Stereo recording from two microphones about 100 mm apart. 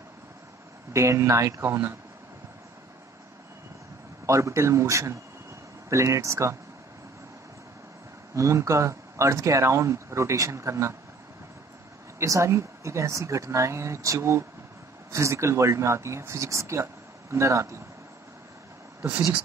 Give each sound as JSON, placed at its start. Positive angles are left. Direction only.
{"t": 0.9, "sound": "speech", "side_deg": -30}
{"t": 4.3, "sound": "speech", "side_deg": -30}
{"t": 8.4, "sound": "speech", "side_deg": -30}
{"t": 12.2, "sound": "speech", "side_deg": -30}
{"t": 18.9, "sound": "speech", "side_deg": -25}